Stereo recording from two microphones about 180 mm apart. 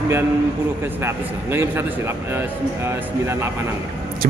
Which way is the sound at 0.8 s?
10° right (ahead or behind).